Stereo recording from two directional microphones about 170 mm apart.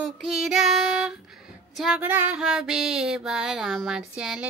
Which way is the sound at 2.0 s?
10° right (ahead or behind).